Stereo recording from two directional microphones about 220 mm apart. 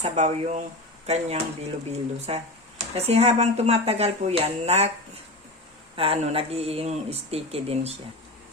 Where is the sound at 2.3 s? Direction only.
25° right (ahead or behind).